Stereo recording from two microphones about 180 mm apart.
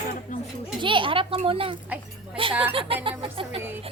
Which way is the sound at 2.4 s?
30° right (ahead or behind).